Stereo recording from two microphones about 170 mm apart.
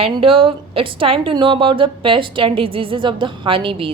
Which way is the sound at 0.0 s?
30° right (ahead or behind).